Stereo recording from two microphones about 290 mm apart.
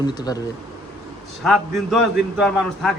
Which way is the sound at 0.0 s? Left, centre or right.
Centre.